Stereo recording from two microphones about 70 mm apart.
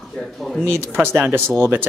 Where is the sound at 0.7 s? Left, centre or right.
Right.